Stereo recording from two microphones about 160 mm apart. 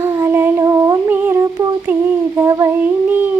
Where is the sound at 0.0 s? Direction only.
20° right (ahead or behind).